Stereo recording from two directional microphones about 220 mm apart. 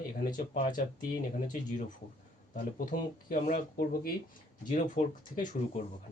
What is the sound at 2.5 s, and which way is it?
Speech, 40° left (ahead or behind).